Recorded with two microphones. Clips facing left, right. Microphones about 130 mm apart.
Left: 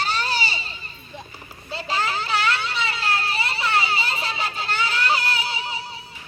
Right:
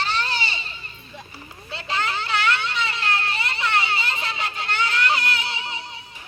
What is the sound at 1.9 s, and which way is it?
Children playing, 5° left (ahead or behind).